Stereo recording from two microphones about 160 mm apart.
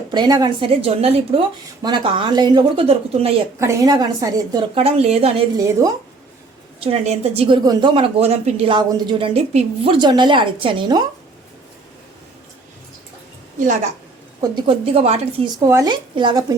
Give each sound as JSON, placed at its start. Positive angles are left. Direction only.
{"t": 0.1, "sound": "a woman's voice", "side_deg": -25}
{"t": 3.6, "sound": "a woman's voice", "side_deg": -20}
{"t": 4.7, "sound": "a woman's voice", "side_deg": -40}
{"t": 5.5, "sound": "a woman's voice", "side_deg": -20}
{"t": 6.8, "sound": "a woman's voice", "side_deg": -40}
{"t": 7.4, "sound": "a woman's voice", "side_deg": -25}
{"t": 14.4, "sound": "a woman's voice", "side_deg": -30}
{"t": 15.5, "sound": "a woman's voice", "side_deg": -20}